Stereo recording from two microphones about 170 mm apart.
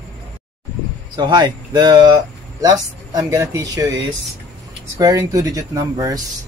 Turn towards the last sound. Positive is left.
turn(degrees=-20)  # may be behind; listen again after turning